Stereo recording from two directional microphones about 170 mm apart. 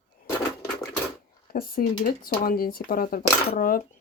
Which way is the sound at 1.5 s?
60° left (ahead or behind).